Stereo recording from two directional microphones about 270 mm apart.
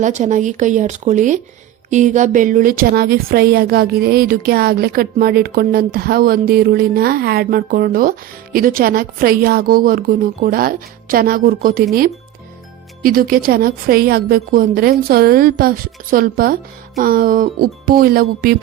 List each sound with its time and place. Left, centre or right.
0.0 s a woman's voice: right
13.0 s a woman's voice: right